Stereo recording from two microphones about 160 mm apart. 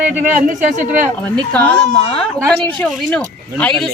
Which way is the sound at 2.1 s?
5° left (ahead or behind).